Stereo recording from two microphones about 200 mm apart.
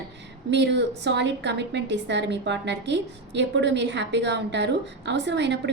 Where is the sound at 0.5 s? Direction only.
60° right (ahead or behind).